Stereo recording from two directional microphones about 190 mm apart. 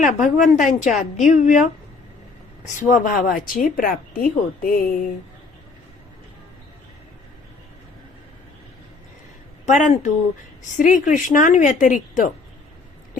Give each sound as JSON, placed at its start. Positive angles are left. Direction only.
{"t": 0.0, "sound": "a woman's voice", "side_deg": 40}
{"t": 2.7, "sound": "a woman's voice", "side_deg": 40}
{"t": 9.6, "sound": "a woman's voice", "side_deg": 40}